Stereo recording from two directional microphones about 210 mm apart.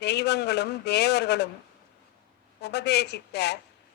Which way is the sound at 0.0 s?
50° left (ahead or behind).